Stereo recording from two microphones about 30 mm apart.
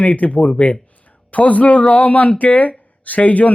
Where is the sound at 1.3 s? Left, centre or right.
Left.